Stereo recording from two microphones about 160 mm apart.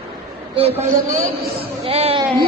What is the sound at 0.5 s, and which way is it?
A man's voice, 40° right (ahead or behind).